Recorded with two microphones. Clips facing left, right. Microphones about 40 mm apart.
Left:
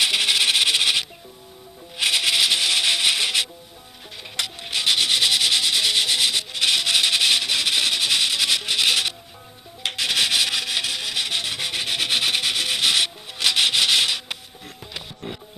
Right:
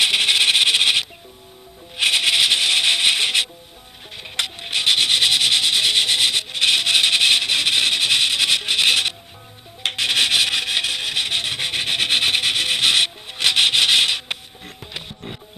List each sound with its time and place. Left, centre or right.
0.0 s a sound: right
2.0 s music: centre
4.4 s sanding: centre
9.8 s rub: centre
15.2 s music: centre